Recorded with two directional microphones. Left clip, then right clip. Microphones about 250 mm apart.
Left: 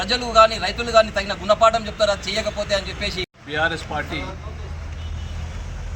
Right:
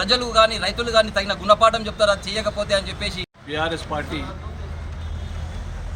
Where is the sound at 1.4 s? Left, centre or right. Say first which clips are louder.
Even; centre.